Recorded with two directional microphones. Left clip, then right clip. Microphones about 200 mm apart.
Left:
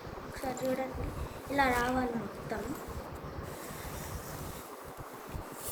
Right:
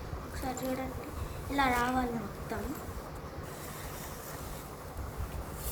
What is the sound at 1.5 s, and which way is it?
Speech, 45° right (ahead or behind).